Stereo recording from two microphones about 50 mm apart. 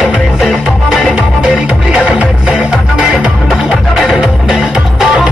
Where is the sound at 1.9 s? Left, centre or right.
Right.